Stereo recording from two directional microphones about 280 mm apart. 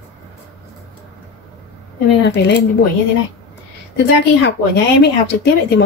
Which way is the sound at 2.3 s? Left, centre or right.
Left.